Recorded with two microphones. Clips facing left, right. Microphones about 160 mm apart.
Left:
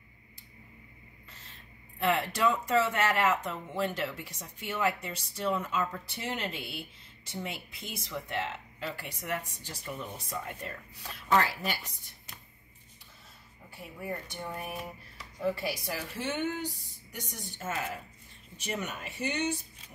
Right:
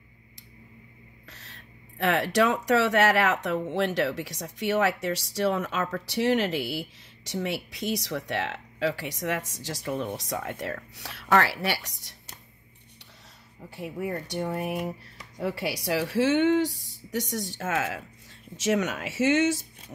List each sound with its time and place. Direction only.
1.3 s speech: 80° right
13.7 s speech: 80° right